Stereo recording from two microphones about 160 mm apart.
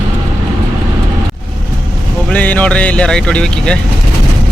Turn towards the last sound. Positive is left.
turn(degrees=5)  # may be behind; listen again after turning